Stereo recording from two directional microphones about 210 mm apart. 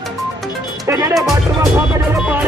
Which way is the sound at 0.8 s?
15° right (ahead or behind).